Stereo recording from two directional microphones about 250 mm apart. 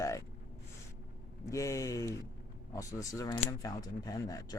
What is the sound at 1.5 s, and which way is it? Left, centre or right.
Speech, centre.